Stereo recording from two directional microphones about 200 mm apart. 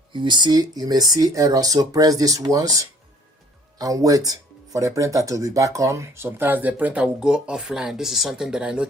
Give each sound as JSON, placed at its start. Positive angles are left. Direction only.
{"t": 0.1, "sound": "speech", "side_deg": -25}